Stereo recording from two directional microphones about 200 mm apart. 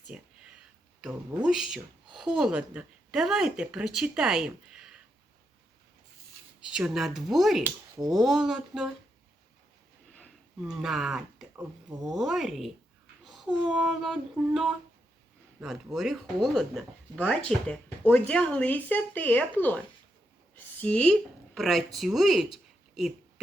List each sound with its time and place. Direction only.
0.1 s a sound: 5° right (ahead or behind)
1.5 s a woman's voice: 5° right (ahead or behind)
6.7 s a woman's voice: 5° right (ahead or behind)
7.6 s speech: 20° right (ahead or behind)
8.1 s a woman's voice: centre (ahead or behind)
10.6 s a woman's voice: 5° right (ahead or behind)